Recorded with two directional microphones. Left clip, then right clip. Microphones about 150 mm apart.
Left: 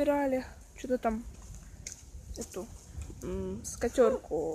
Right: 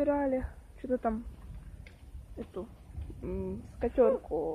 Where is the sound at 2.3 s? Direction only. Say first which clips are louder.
Left 1 dB; 15° left (ahead or behind).